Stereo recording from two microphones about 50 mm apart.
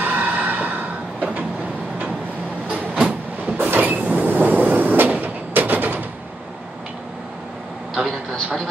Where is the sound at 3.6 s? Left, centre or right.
Right.